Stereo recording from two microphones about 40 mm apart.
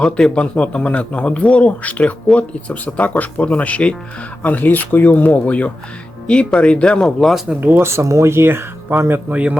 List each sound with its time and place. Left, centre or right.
0.3 s a man's voice: left
2.8 s speech: left
4.4 s a man's voice: left
7.8 s speech: right
9.0 s a man's voice: right
9.3 s speech: right